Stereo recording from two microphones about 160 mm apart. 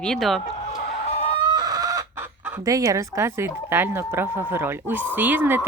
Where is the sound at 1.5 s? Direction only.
25° right (ahead or behind).